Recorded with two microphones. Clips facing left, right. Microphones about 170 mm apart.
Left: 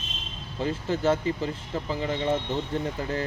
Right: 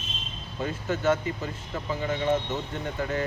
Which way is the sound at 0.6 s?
30° left (ahead or behind).